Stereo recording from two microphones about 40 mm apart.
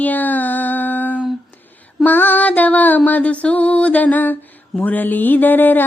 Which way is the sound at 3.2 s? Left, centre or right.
Left.